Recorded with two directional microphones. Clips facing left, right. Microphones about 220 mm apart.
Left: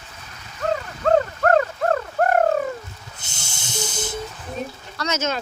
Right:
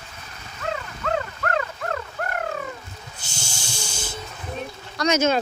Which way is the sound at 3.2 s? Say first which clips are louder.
Right 3 dB; 20° left (ahead or behind).